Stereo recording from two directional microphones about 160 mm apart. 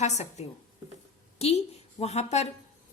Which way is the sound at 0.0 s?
45° left (ahead or behind).